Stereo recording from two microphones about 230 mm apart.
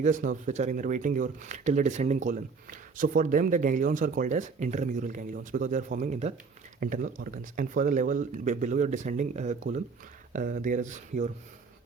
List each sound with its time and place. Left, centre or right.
0.0 s speech: right